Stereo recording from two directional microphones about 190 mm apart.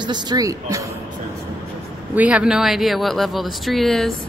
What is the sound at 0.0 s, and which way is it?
Speech, 20° right (ahead or behind).